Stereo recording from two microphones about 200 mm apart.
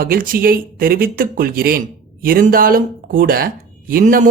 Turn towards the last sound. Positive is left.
turn(degrees=-40)  # may be behind; listen again after turning